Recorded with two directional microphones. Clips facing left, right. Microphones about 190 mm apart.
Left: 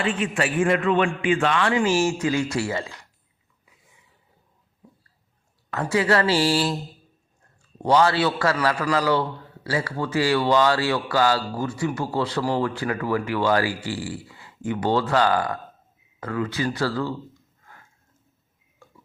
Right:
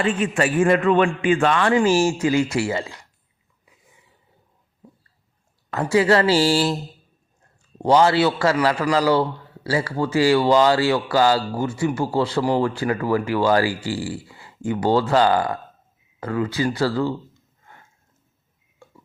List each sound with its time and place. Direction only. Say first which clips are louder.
0.0 s a man's voice: right 4 dB; 45° right (ahead or behind); by 2.8 s 25° right (ahead or behind)
5.7 s speech: right 4 dB; 30° right (ahead or behind)
7.8 s speech: right 3 dB; 25° right (ahead or behind)
18.8 s tick-tock: right 4 dB; 25° right (ahead or behind)